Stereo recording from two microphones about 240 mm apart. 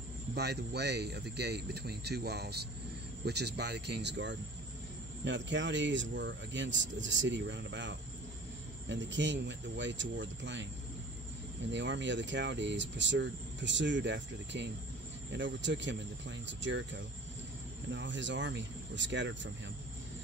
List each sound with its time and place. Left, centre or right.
0.3 s speech: right
11.7 s speech: right